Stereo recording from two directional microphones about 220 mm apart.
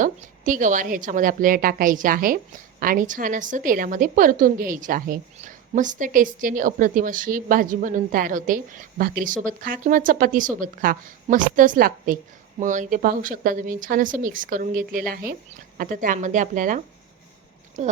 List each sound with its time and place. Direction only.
0.0 s a woman's voice: 35° right (ahead or behind)